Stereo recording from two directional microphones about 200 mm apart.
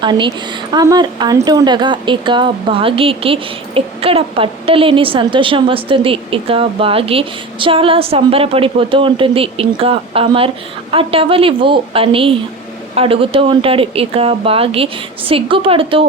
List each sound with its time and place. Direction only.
0.0 s a woman's voice: 25° right (ahead or behind)